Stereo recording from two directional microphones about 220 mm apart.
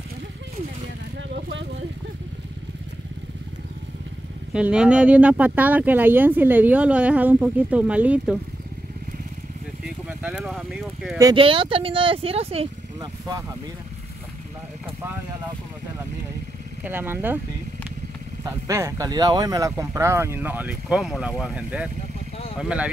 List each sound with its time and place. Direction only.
1.3 s vehicle: 55° right (ahead or behind)
4.5 s speech: 5° right (ahead or behind)
9.8 s a sound: 5° right (ahead or behind)
11.1 s speech: 20° right (ahead or behind)
16.8 s speech: 10° right (ahead or behind)
18.4 s speech: 15° right (ahead or behind)